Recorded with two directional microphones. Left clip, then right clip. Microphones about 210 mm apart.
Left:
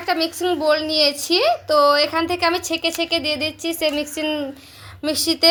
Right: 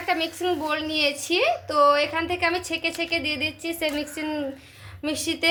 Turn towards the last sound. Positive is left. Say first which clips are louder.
# left 7 dB
turn(degrees=35)  # may be behind; listen again after turning